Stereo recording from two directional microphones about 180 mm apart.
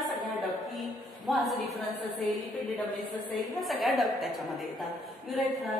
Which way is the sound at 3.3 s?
Centre (ahead or behind).